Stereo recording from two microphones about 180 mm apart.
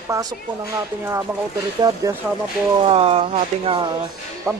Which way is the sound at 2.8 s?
30° right (ahead or behind).